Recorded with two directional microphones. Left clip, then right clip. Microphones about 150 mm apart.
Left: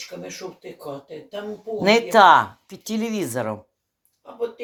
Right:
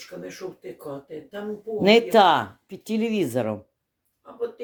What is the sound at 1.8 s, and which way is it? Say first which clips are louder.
Speech: left 2 dB; 35° right (ahead or behind).